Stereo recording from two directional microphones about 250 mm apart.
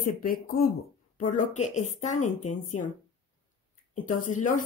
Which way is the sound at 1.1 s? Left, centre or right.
Left.